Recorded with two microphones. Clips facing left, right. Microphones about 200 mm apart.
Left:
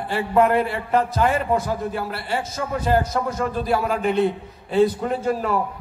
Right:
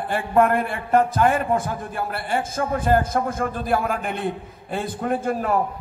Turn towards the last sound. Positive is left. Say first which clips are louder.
# even
turn(degrees=-50)  # may be behind; listen again after turning